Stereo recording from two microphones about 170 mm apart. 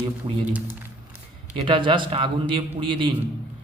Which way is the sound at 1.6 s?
30° right (ahead or behind).